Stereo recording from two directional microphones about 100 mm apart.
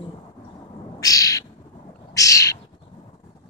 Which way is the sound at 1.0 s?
35° left (ahead or behind).